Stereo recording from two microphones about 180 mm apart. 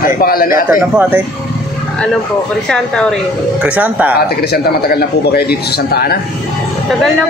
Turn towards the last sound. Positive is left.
turn(degrees=60)  # may be behind; listen again after turning